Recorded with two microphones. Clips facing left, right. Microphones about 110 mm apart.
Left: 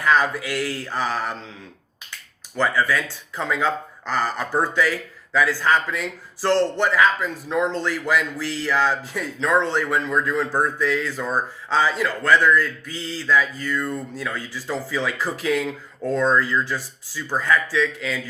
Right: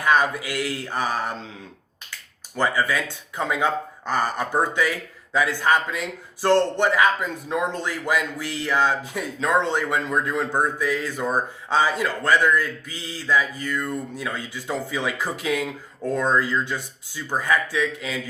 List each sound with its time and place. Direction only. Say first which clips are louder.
0.0 s a man's voice: even; 15° right (ahead or behind)
2.6 s a man's voice: left 1 dB; 15° right (ahead or behind)